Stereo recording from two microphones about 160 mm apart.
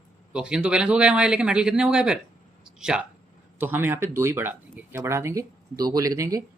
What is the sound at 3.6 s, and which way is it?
Speech, 10° right (ahead or behind).